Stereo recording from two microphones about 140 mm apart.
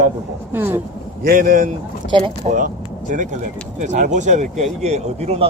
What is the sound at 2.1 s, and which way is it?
Speech, 35° right (ahead or behind).